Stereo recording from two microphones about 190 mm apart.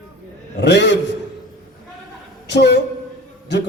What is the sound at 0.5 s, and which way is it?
Speech, 65° left (ahead or behind).